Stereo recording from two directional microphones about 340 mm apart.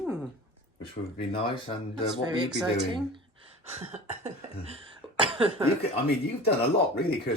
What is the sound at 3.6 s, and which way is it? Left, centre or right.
Cough, centre.